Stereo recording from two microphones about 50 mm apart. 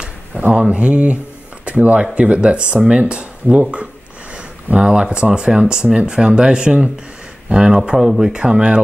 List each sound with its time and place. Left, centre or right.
0.0 s a sound: right
1.7 s speech: right
4.6 s speech: centre